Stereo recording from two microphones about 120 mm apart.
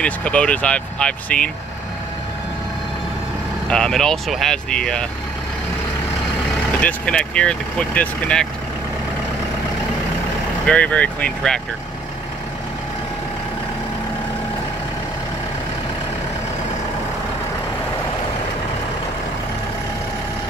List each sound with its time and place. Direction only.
0.0 s speech: 10° left (ahead or behind)
3.6 s speech: 5° left (ahead or behind)
6.8 s speech: 10° left (ahead or behind)
10.7 s speech: 10° left (ahead or behind)